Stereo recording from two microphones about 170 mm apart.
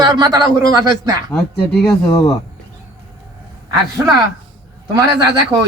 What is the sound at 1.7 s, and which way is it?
Speech, 5° left (ahead or behind).